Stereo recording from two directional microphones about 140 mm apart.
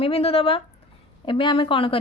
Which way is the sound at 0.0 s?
45° left (ahead or behind).